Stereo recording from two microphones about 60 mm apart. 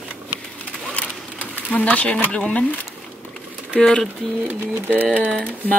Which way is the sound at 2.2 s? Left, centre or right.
Centre.